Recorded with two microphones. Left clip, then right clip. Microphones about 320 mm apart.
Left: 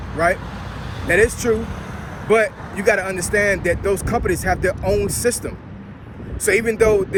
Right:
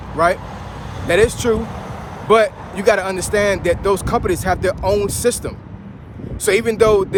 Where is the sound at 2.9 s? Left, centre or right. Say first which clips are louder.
Right 2 dB; centre.